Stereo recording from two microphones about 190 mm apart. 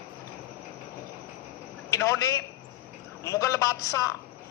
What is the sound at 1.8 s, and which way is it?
A man's voice, 15° left (ahead or behind).